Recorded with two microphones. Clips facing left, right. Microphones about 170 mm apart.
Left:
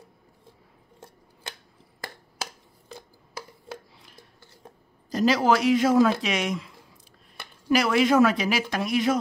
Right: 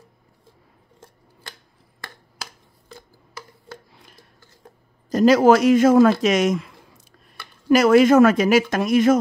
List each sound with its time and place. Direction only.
5.1 s speech: 50° right (ahead or behind)